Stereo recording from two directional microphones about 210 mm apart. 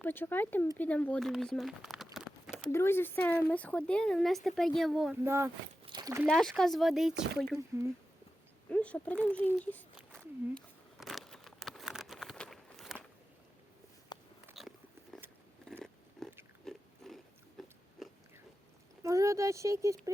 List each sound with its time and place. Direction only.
0.0 s speech: 10° left (ahead or behind)
2.7 s speech: 10° left (ahead or behind)
5.2 s speech: 10° right (ahead or behind)
5.8 s a sound: 20° right (ahead or behind)
6.2 s speech: centre (ahead or behind)
8.7 s a child's voice: 5° left (ahead or behind)
9.6 s a sound: 5° left (ahead or behind)
14.1 s biting: 20° left (ahead or behind)
14.6 s biting: centre (ahead or behind)
16.2 s pig: centre (ahead or behind)
18.0 s biting: centre (ahead or behind)
19.0 s speech: 15° right (ahead or behind)